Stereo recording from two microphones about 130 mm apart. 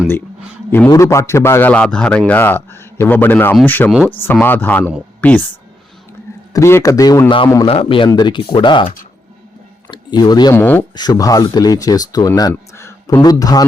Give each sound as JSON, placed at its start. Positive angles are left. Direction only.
{"t": 0.9, "sound": "a man's voice", "side_deg": 20}
{"t": 6.5, "sound": "speech", "side_deg": 20}
{"t": 7.7, "sound": "speech", "side_deg": 45}
{"t": 9.9, "sound": "speech", "side_deg": 35}
{"t": 10.5, "sound": "a man's voice", "side_deg": 15}
{"t": 10.9, "sound": "speech", "side_deg": 30}